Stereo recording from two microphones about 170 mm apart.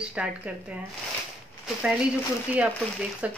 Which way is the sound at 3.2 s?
10° right (ahead or behind).